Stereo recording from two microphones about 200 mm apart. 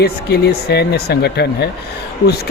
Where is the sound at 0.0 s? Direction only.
55° left (ahead or behind).